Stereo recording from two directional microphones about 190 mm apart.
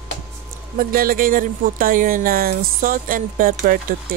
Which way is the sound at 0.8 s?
50° right (ahead or behind).